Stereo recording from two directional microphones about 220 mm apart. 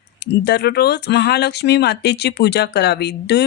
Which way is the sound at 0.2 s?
50° left (ahead or behind).